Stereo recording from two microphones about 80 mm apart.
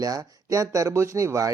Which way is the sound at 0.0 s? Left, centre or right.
Right.